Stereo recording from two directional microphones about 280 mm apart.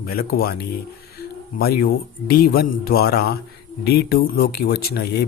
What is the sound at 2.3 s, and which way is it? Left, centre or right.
Speech, left.